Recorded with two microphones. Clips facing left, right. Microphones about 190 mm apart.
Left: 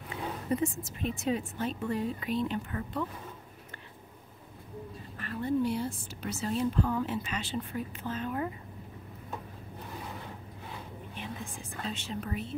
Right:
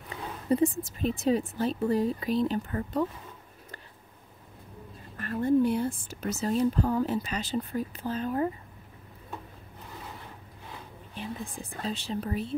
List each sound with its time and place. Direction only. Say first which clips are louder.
0.5 s speech: right 7 dB; 35° right (ahead or behind)
5.1 s speech: right 6 dB; 45° right (ahead or behind)
11.8 s speech: right 4 dB; 35° right (ahead or behind)